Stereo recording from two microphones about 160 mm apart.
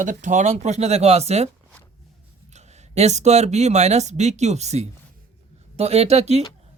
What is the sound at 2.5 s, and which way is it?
Speech, 45° right (ahead or behind).